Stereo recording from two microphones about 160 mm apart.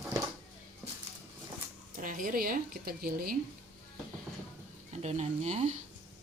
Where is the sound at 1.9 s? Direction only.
60° right (ahead or behind).